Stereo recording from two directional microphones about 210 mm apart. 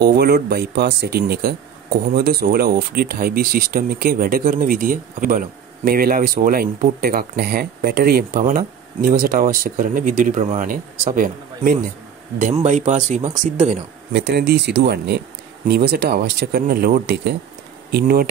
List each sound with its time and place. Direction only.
0.0 s speech: 50° right (ahead or behind); by 13.8 s 35° right (ahead or behind)
14.1 s speech: 50° right (ahead or behind)